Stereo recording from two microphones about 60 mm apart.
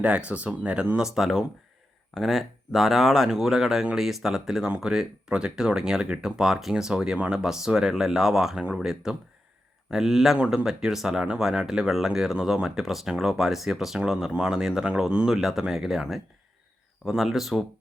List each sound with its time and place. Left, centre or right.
0.0 s speech: centre
0.9 s speech: centre
10.3 s speech: centre
10.7 s speech: centre